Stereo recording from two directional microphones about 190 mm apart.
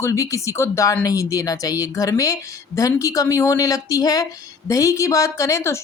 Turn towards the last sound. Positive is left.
turn(degrees=15)  # may be behind; listen again after turning